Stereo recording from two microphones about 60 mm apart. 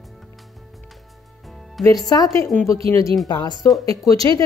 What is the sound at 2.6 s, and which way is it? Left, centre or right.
Speech, left.